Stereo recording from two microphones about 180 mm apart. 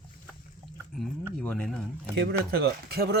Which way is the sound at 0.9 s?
5° left (ahead or behind).